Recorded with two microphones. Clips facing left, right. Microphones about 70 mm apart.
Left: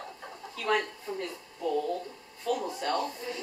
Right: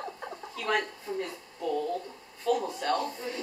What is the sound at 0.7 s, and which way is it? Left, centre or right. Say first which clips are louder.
Speech: left 1 dB; centre.